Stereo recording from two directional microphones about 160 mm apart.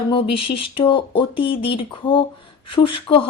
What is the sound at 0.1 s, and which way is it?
A woman's voice, 35° left (ahead or behind).